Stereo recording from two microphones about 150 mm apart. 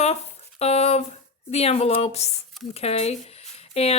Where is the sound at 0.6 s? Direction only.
45° left (ahead or behind).